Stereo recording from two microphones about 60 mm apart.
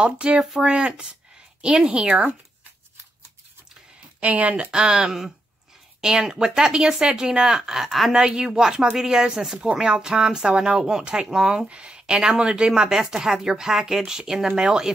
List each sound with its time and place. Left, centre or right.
0.0 s speech: centre
4.2 s speech: right; by 8.2 s centre
8.2 s speech: centre